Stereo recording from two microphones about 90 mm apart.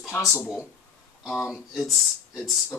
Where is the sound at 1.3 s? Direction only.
5° left (ahead or behind).